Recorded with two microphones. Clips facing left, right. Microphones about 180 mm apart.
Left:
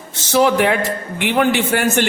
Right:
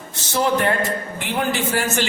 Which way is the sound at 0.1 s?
90° left.